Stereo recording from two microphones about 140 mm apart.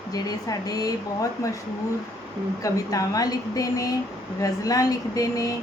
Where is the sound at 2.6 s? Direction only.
25° left (ahead or behind).